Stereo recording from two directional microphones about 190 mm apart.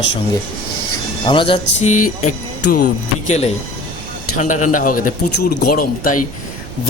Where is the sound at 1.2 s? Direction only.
25° left (ahead or behind).